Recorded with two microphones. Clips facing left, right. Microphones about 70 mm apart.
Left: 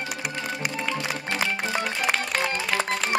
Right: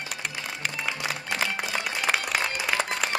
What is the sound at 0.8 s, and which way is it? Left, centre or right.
Music, centre.